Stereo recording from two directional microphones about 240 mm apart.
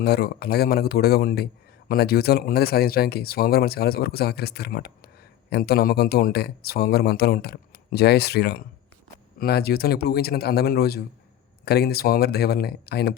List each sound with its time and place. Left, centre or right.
0.0 s speech: left